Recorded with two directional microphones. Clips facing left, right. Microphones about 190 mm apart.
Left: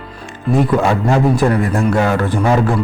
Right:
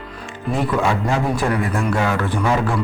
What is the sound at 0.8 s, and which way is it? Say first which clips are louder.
A man's voice: left 5 dB; 45° left (ahead or behind).